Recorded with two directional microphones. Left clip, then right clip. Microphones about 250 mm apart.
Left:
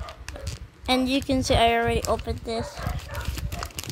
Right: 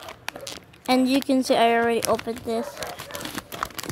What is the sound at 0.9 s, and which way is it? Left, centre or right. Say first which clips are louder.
Speech: right 2 dB; centre.